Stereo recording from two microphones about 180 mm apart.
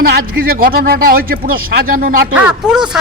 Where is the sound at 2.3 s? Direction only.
5° right (ahead or behind).